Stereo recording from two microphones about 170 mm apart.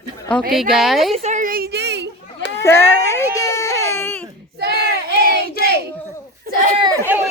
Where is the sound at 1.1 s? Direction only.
45° right (ahead or behind); by 2.1 s 80° right.